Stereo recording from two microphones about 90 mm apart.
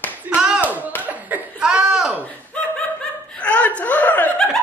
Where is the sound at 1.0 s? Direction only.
20° right (ahead or behind).